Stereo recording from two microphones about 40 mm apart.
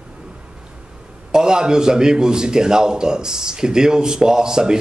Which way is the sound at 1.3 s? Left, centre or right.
Centre.